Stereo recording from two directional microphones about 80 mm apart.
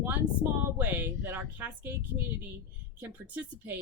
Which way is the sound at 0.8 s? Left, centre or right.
Right.